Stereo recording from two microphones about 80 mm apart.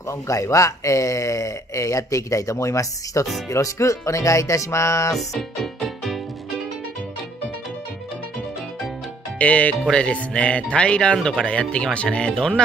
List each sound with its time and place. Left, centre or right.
0.3 s speech: left
3.4 s music: left
5.1 s speech: centre
9.4 s speech: centre